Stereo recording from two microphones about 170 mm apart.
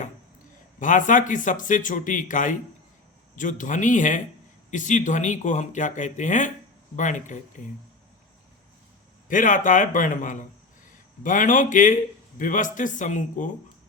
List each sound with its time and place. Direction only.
0.8 s speech: 50° left (ahead or behind)
9.3 s speech: 50° left (ahead or behind)